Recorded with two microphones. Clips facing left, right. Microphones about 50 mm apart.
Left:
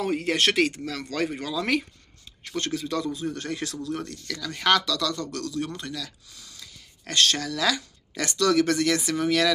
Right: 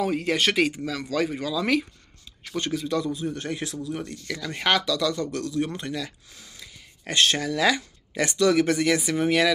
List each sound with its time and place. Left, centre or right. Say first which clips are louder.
0.0 s a man's voice: even; centre
3.3 s speech: right 1 dB; centre